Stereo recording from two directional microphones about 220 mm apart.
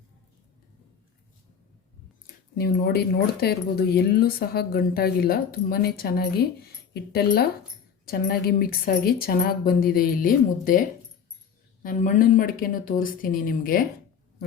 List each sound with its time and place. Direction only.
2.2 s a woman's voice: 45° left (ahead or behind)